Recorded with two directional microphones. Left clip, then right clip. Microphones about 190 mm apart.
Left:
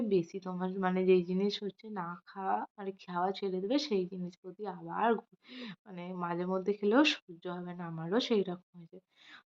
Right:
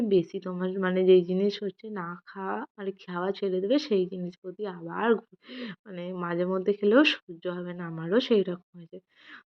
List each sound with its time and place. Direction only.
0.1 s a woman's voice: 15° right (ahead or behind)